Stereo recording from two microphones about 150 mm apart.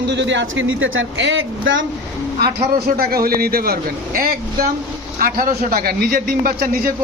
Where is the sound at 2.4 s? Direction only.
90° right.